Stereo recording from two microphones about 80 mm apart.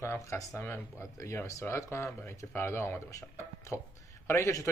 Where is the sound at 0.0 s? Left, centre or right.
Left.